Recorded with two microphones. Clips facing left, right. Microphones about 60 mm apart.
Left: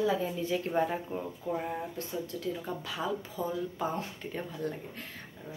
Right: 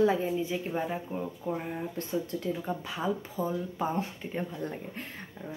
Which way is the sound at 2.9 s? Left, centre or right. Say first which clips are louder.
Even; centre.